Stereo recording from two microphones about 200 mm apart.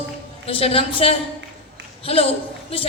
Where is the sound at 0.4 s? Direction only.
30° left (ahead or behind).